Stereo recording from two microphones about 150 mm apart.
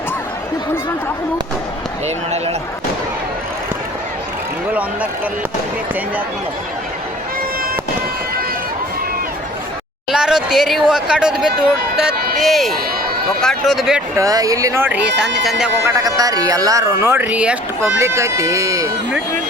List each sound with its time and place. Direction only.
2.0 s speech: 45° right (ahead or behind)
10.1 s speech: 5° right (ahead or behind)
14.2 s speech: 25° right (ahead or behind); by 15.7 s 5° right (ahead or behind)
15.8 s speech: 20° right (ahead or behind)
18.0 s speech: 20° right (ahead or behind)